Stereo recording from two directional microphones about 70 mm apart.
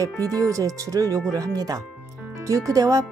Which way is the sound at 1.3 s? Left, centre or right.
Right.